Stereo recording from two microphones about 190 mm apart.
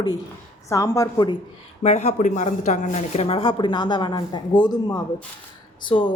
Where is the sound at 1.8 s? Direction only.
35° left (ahead or behind).